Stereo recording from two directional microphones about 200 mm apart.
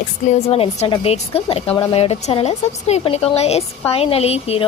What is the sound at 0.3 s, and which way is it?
A woman's voice, 30° left (ahead or behind).